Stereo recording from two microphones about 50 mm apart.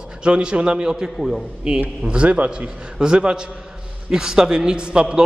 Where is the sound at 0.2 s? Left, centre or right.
Centre.